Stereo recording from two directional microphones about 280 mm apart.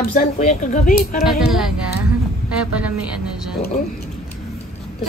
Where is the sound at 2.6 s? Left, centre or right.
Centre.